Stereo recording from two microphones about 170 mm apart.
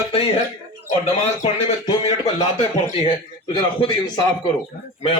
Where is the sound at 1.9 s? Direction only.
35° left (ahead or behind).